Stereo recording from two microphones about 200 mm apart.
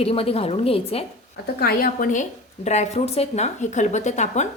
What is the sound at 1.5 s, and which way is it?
A woman's voice, 50° left (ahead or behind).